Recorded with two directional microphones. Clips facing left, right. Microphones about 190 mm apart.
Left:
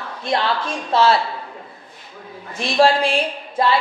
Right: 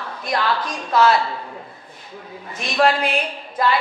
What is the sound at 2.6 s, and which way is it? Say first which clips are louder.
Speech: left 3 dB; 30° left (ahead or behind).